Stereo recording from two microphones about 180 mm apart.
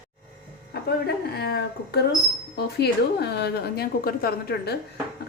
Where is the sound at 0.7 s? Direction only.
65° left (ahead or behind).